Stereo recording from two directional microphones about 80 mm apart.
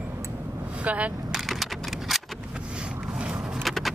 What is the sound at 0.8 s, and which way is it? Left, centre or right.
Vehicle, centre.